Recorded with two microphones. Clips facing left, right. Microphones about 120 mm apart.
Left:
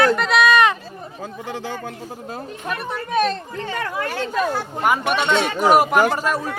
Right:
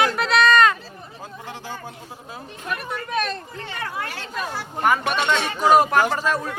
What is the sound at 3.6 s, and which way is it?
Speech, 50° left (ahead or behind).